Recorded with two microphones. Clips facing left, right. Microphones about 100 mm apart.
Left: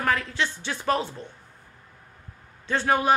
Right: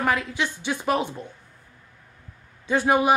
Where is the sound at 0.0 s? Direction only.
15° right (ahead or behind).